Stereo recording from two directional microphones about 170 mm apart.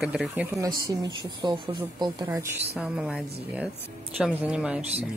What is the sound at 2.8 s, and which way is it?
Speech, 5° right (ahead or behind).